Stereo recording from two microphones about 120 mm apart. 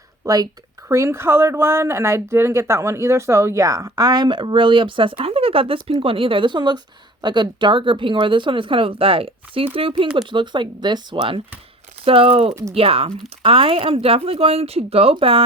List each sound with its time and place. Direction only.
0.2 s speech: 30° right (ahead or behind); by 15.4 s 50° right (ahead or behind)